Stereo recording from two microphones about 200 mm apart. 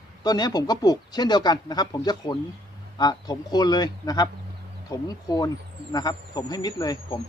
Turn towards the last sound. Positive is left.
turn(degrees=20)  # may be behind; listen again after turning